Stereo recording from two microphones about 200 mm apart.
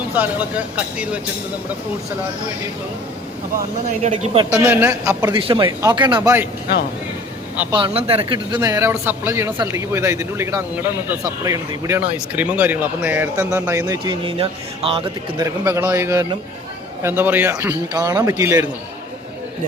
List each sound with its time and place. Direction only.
0.1 s speech: 10° right (ahead or behind)
3.8 s speech: 35° right (ahead or behind)
4.5 s speech: 10° right (ahead or behind)
5.4 s speech: 25° right (ahead or behind)
7.7 s speech: 25° right (ahead or behind)
15.4 s speech: 15° right (ahead or behind)